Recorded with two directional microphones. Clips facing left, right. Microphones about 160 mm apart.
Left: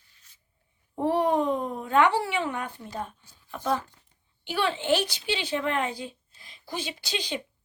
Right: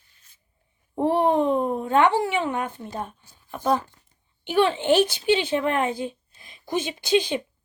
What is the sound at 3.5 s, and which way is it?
Speech, 45° right (ahead or behind).